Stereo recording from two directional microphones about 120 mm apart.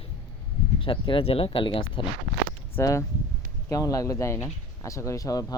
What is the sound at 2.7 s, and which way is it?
Speech, 25° left (ahead or behind).